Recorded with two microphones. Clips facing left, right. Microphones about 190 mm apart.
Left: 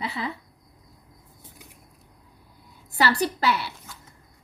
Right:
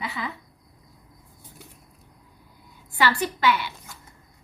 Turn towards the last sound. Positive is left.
turn(degrees=35)  # may be behind; listen again after turning